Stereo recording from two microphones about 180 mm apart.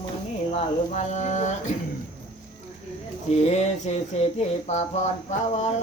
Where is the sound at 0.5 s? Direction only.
40° left (ahead or behind).